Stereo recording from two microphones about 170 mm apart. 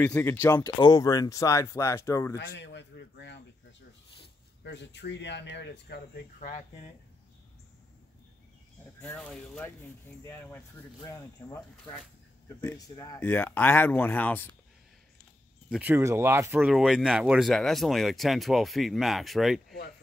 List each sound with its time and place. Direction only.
0.0 s speech: 10° left (ahead or behind)
0.7 s speech: 25° left (ahead or behind)
2.3 s a sound: 90° left
4.6 s speech: 90° left
9.0 s speech: 10° left (ahead or behind)
15.7 s speech: 10° right (ahead or behind)
16.6 s speech: centre (ahead or behind)